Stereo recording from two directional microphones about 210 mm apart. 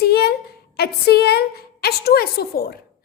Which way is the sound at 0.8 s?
50° left (ahead or behind).